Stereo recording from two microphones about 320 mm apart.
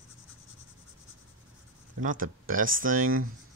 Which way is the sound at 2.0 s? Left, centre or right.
Right.